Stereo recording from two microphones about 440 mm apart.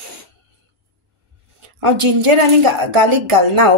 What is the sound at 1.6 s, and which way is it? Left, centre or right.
Speech, right.